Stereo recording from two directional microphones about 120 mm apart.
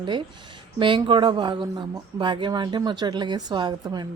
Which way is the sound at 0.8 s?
45° right (ahead or behind).